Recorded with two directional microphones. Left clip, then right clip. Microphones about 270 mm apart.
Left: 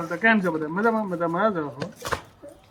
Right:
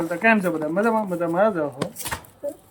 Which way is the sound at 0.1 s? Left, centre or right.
Centre.